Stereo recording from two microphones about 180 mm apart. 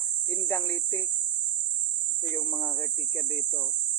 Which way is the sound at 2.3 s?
10° left (ahead or behind).